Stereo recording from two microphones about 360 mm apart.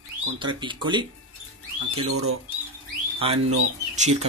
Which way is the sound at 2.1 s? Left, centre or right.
Right.